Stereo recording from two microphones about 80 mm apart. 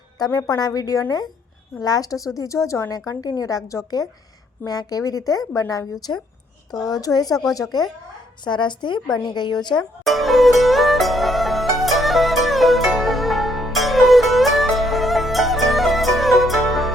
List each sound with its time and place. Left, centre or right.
0.3 s speech: left
0.5 s speech: left
2.9 s speech: left
4.6 s speech: left
8.4 s speech: left
10.0 s music: centre